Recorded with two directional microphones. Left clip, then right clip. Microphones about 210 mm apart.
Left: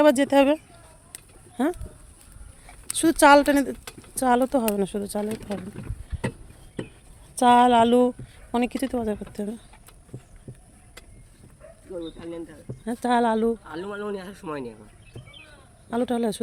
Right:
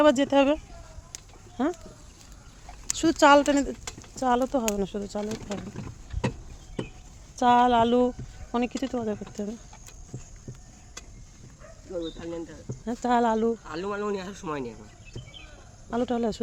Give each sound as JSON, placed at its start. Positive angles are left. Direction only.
{"t": 0.0, "sound": "speech", "side_deg": 20}
{"t": 2.9, "sound": "speech", "side_deg": 20}
{"t": 5.5, "sound": "a sound", "side_deg": 5}
{"t": 7.3, "sound": "speech", "side_deg": 30}
{"t": 12.1, "sound": "speech", "side_deg": -5}
{"t": 12.8, "sound": "speech", "side_deg": 15}
{"t": 13.7, "sound": "speech", "side_deg": 0}
{"t": 15.9, "sound": "speech", "side_deg": 20}